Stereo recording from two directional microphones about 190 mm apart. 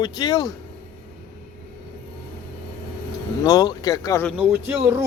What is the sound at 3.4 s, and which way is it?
Speech, 20° left (ahead or behind).